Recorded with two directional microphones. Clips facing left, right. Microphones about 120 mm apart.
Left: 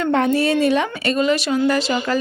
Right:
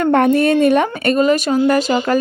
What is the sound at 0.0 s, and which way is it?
A woman's voice, 55° right (ahead or behind).